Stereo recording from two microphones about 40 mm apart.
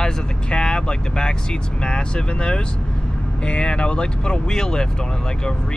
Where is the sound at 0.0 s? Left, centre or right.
Centre.